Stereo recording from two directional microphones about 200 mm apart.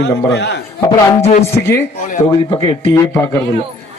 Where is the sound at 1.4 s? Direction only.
15° left (ahead or behind).